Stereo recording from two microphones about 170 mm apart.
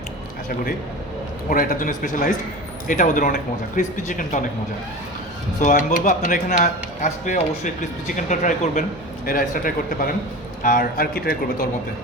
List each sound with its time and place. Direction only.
1.5 s speech: 55° left (ahead or behind)
5.5 s a man's voice: 50° left (ahead or behind)